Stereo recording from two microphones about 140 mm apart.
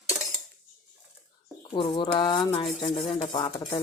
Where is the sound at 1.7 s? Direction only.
35° left (ahead or behind).